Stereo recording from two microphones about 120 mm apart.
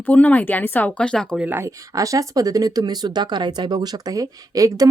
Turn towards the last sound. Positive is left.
turn(degrees=-30)  # may be behind; listen again after turning